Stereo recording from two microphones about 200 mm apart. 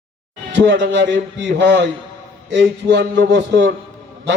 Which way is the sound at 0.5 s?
60° right (ahead or behind).